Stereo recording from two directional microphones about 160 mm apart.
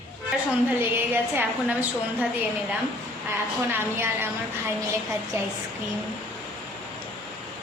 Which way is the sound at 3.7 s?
15° right (ahead or behind).